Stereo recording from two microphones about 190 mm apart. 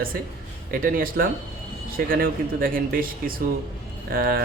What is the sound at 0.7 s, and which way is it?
Speech, 50° right (ahead or behind).